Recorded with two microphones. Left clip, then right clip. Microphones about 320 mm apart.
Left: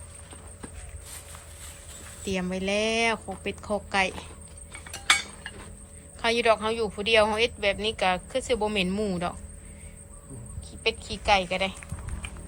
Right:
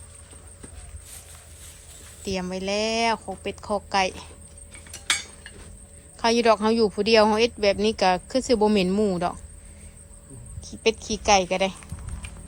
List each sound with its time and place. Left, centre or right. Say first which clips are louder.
2.3 s a woman's voice: right 1 dB; centre
5.0 s a sound: left 3 dB; centre
6.1 s a woman's voice: right 3 dB; centre
10.7 s a woman's voice: right 5 dB; centre